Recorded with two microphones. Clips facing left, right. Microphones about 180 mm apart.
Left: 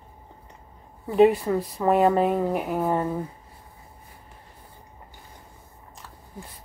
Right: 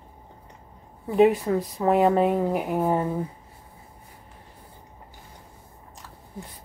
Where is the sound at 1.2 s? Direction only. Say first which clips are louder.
Left 1 dB; centre (ahead or behind).